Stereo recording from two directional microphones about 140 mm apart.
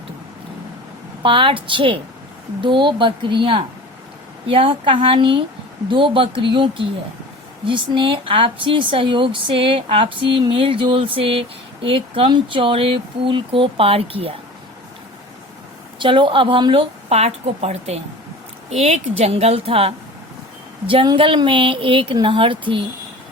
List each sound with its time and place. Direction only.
1.2 s speech: 35° right (ahead or behind)
16.0 s a woman's voice: 35° right (ahead or behind)